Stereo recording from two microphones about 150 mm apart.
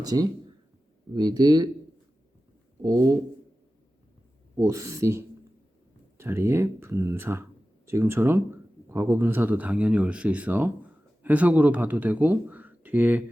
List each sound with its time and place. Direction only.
0.0 s speech: 25° right (ahead or behind)
2.8 s speech: 25° right (ahead or behind)
4.5 s speech: 20° right (ahead or behind)